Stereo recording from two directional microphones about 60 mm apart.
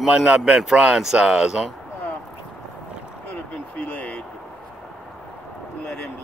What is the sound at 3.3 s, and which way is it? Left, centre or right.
Vehicle, left.